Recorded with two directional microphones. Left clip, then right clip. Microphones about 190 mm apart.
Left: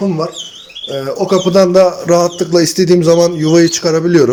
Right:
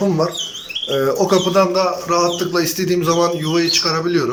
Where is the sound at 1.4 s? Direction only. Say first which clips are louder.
Left 7 dB; 30° left (ahead or behind).